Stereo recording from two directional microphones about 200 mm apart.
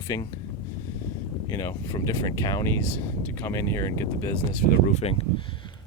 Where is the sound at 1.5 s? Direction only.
15° left (ahead or behind).